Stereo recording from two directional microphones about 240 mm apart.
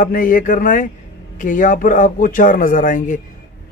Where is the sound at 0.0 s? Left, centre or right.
Left.